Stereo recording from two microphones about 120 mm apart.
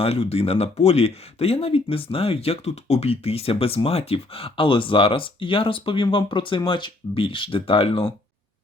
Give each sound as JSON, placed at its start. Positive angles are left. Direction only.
{"t": 0.0, "sound": "speech", "side_deg": 55}